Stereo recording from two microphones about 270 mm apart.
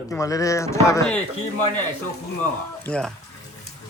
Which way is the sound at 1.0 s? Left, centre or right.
Left.